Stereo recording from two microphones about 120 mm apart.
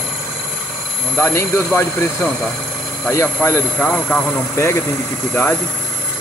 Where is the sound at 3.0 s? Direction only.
25° left (ahead or behind).